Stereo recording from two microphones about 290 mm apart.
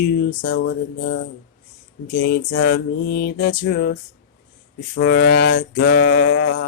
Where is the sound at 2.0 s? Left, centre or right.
Left.